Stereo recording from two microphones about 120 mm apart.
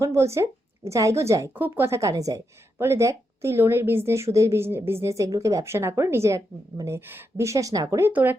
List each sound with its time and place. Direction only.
0.0 s a woman's voice: 25° right (ahead or behind)